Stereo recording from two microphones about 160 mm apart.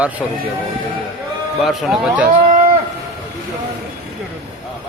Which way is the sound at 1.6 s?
Centre (ahead or behind).